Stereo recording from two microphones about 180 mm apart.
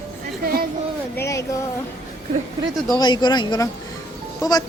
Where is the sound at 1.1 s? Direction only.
15° left (ahead or behind).